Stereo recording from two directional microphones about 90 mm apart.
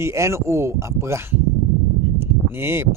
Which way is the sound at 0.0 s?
30° right (ahead or behind).